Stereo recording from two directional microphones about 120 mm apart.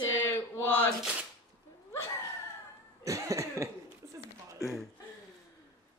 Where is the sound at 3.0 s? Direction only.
25° right (ahead or behind).